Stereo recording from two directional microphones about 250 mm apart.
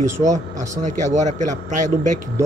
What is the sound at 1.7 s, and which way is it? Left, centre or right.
Speech, right.